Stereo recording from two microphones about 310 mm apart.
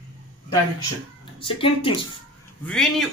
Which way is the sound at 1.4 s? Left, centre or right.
Centre.